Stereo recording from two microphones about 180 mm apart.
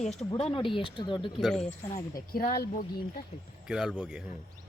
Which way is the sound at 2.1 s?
55° left (ahead or behind).